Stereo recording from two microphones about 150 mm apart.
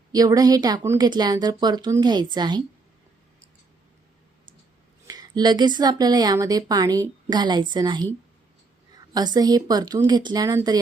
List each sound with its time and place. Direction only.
0.1 s a woman's voice: 25° right (ahead or behind)
5.0 s speech: 25° right (ahead or behind)
9.1 s speech: 25° right (ahead or behind)